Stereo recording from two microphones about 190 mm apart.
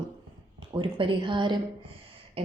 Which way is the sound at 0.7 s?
25° right (ahead or behind).